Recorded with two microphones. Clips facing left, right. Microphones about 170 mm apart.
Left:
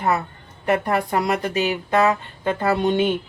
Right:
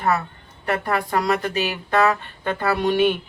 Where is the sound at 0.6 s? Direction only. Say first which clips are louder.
Left 3 dB; 20° left (ahead or behind).